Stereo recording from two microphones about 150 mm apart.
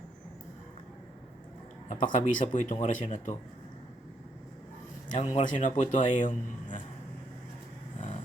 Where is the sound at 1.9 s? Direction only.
60° left (ahead or behind).